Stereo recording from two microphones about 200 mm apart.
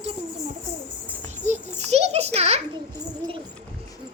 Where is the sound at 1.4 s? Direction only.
35° right (ahead or behind).